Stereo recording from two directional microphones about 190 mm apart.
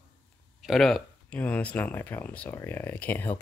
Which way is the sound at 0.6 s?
Centre (ahead or behind).